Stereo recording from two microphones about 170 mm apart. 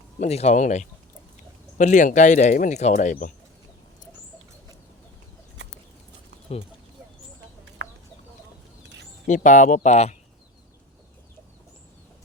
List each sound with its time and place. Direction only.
0.2 s speech: 40° left (ahead or behind)
5.6 s bird: 90° right
7.8 s chicken: 90° right
9.2 s speech: 45° left (ahead or behind)